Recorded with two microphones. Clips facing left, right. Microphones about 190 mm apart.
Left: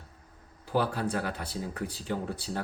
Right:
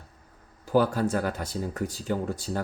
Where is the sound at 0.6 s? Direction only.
45° right (ahead or behind).